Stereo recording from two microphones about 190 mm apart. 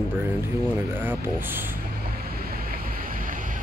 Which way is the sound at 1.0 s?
10° right (ahead or behind).